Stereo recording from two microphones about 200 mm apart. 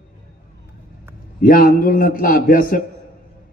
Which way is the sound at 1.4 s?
45° left (ahead or behind).